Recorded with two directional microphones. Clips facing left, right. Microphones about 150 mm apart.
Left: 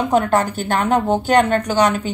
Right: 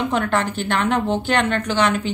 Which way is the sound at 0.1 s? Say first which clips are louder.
Left 4 dB; 40° left (ahead or behind).